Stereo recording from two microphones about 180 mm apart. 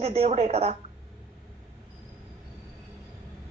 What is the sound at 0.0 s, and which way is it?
Speech, 35° right (ahead or behind).